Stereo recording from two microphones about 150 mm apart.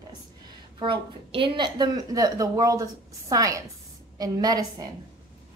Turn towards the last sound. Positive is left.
turn(degrees=-25)  # may be behind; listen again after turning